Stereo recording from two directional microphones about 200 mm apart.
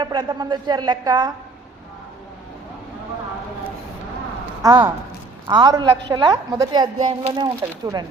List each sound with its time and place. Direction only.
0.0 s speech: 20° right (ahead or behind)
4.6 s speech: 15° right (ahead or behind)